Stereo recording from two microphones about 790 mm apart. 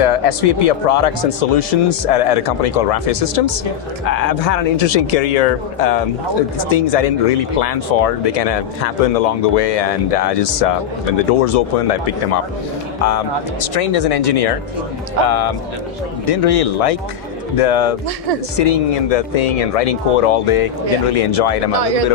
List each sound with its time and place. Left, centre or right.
0.0 s speech: left